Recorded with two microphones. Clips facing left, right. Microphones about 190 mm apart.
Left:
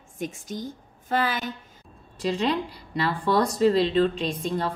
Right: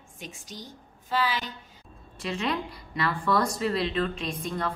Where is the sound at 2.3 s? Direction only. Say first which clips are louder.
Left 4 dB; 35° left (ahead or behind).